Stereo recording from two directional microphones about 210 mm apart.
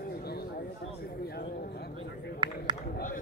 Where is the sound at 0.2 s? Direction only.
50° left (ahead or behind).